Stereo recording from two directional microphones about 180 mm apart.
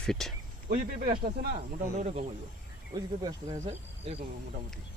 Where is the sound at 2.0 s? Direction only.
35° right (ahead or behind).